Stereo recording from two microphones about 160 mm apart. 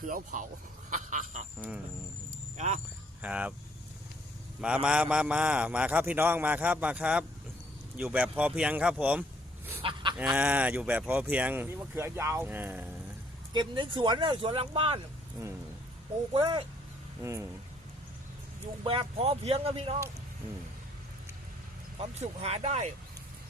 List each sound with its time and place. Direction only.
0.1 s speech: 55° right (ahead or behind)
2.6 s speech: 45° right (ahead or behind)
3.2 s speech: 10° right (ahead or behind)
4.6 s a man's voice: 5° right (ahead or behind)
9.8 s speech: 30° right (ahead or behind)
10.2 s a man's voice: 10° right (ahead or behind)
13.5 s speech: 30° right (ahead or behind)
15.4 s speech: 20° right (ahead or behind)
16.3 s speech: 30° right (ahead or behind)
17.2 s speech: 20° right (ahead or behind)
18.8 s speech: 35° right (ahead or behind)
21.9 s speech: 40° right (ahead or behind)